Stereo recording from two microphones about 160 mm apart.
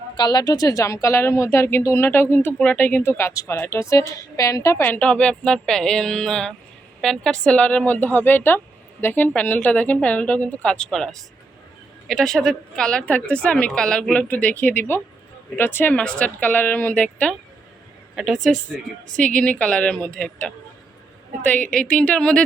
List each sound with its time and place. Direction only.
0.2 s a woman's voice: 25° left (ahead or behind); by 22.4 s 5° left (ahead or behind)